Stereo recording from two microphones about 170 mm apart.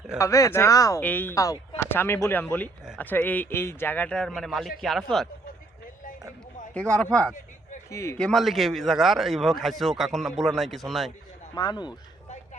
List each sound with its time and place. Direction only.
0.2 s a man's voice: 20° left (ahead or behind); by 5.3 s centre (ahead or behind)
6.7 s a man's voice: 5° left (ahead or behind)
7.9 s speech: 15° left (ahead or behind)
8.2 s a man's voice: centre (ahead or behind)
11.5 s speech: 25° left (ahead or behind)